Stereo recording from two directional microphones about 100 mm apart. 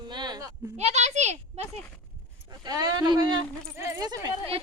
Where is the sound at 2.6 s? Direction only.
45° right (ahead or behind).